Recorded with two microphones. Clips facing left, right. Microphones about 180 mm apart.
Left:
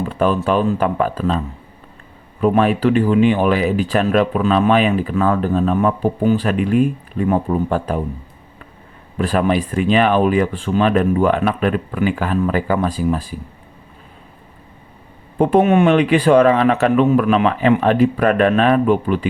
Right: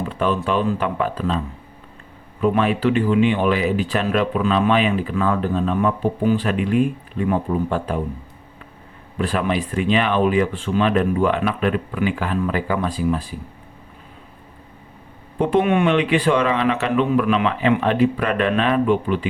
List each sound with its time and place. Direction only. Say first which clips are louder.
0.4 s speech: left 4 dB; 45° left (ahead or behind)
2.4 s speech: left 3 dB; 45° left (ahead or behind)
9.1 s speech: left 4 dB; 45° left (ahead or behind)
15.4 s speech: left 4 dB; 40° left (ahead or behind)